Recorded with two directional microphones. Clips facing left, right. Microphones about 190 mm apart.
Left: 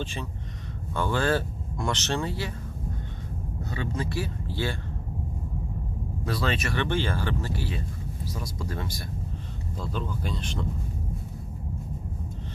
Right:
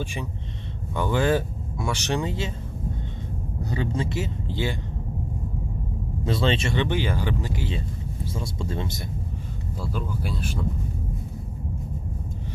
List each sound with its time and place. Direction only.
0.0 s speech: 15° right (ahead or behind)
3.7 s speech: 25° right (ahead or behind)
6.2 s speech: 25° right (ahead or behind)
9.8 s speech: 10° right (ahead or behind)